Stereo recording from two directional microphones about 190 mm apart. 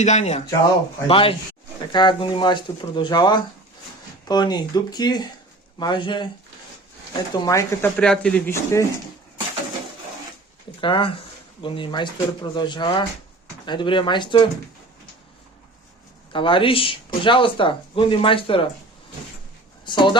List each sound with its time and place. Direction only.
0.0 s speech: 35° left (ahead or behind)
7.3 s speech: 20° left (ahead or behind)
7.9 s speech: 5° left (ahead or behind)
10.8 s speech: 25° left (ahead or behind)
16.3 s speech: 25° left (ahead or behind)
19.8 s speech: 25° left (ahead or behind)